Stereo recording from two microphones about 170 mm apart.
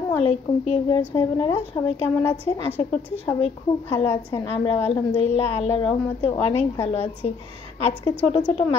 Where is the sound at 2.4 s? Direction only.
35° left (ahead or behind).